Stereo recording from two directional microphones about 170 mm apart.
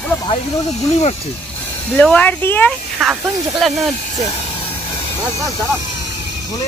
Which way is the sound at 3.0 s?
Centre (ahead or behind).